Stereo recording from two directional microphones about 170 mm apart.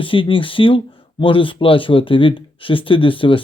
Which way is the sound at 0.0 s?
30° left (ahead or behind).